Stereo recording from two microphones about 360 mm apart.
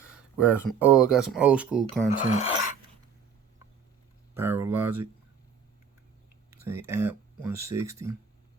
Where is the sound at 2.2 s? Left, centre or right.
Centre.